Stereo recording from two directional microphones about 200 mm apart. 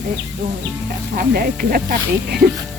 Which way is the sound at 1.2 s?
50° right (ahead or behind).